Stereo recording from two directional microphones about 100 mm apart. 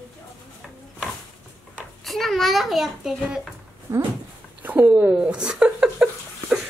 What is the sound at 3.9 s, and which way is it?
Dog, 30° right (ahead or behind).